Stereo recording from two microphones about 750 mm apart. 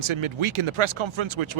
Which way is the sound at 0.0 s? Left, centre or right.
Right.